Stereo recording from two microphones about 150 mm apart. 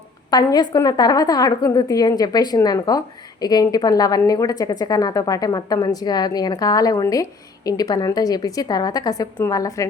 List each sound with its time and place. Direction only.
0.3 s a woman's voice: 25° left (ahead or behind)